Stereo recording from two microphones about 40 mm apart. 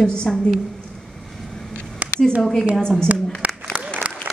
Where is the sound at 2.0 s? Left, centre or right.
Right.